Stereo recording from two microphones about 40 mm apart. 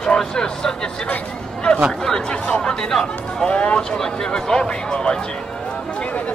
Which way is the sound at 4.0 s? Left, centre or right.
Centre.